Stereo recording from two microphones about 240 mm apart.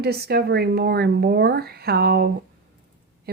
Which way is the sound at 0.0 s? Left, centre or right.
Right.